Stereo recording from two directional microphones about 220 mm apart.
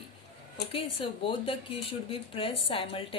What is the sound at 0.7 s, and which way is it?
Speech, 25° left (ahead or behind).